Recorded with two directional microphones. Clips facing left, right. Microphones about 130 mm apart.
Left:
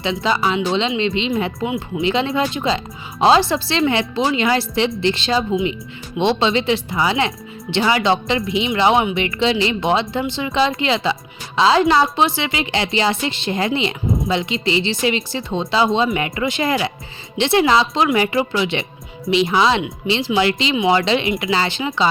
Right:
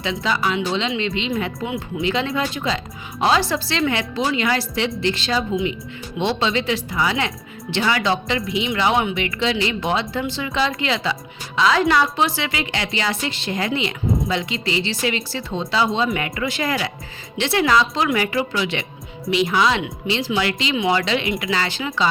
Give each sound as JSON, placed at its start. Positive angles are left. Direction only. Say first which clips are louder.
{"t": 0.0, "sound": "speech", "louder": "left 3 dB", "side_deg": 25}